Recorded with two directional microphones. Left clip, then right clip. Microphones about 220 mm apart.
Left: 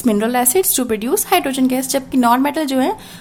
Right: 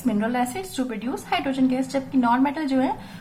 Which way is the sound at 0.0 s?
55° left (ahead or behind).